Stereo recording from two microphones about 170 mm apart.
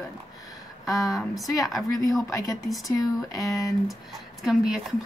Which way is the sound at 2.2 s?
20° left (ahead or behind).